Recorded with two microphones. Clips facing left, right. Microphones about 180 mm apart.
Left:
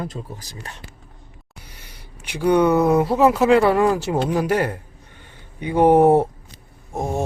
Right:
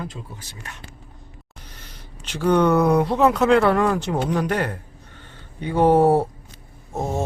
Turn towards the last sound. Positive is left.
turn(degrees=15)  # may be behind; listen again after turning